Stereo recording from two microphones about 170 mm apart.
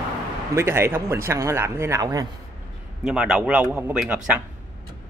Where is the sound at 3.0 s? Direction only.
5° right (ahead or behind).